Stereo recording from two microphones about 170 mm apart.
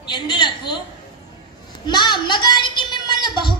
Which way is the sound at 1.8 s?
25° left (ahead or behind).